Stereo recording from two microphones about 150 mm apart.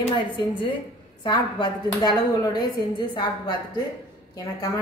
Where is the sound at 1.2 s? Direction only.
30° left (ahead or behind).